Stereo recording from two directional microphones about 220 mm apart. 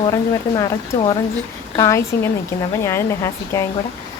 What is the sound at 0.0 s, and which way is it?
Speech, 15° left (ahead or behind).